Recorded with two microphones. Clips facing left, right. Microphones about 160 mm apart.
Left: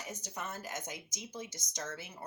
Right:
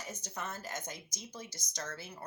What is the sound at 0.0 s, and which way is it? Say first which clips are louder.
Speech: even; 15° left (ahead or behind).